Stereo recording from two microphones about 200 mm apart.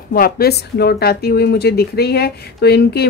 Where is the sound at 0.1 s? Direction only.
50° left (ahead or behind).